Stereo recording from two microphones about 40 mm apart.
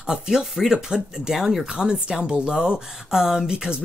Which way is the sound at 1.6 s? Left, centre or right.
Right.